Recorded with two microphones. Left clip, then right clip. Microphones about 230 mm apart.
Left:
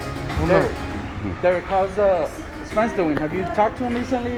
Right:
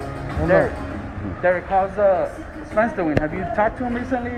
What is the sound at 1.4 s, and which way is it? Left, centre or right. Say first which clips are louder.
Speech: right 1 dB; left.